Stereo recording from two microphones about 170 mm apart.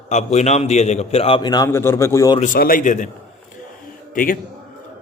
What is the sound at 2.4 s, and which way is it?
Speech, 55° left (ahead or behind).